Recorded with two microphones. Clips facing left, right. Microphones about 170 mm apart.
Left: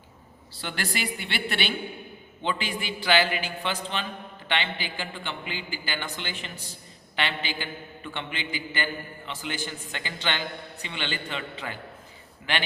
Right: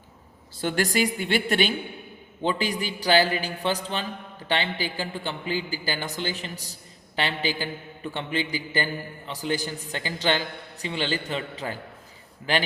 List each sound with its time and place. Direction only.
0.5 s a woman's voice: 45° right (ahead or behind)